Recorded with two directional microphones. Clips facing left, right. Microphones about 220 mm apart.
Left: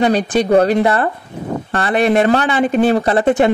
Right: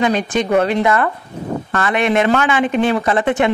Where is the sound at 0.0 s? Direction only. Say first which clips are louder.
Left 3 dB; 35° left (ahead or behind).